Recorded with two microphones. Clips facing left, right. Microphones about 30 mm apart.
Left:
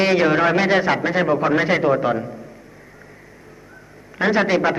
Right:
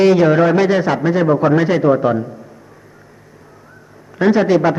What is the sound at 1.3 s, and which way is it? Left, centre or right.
Speech, centre.